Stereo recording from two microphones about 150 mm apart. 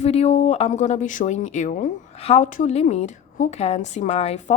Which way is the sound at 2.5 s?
55° left (ahead or behind).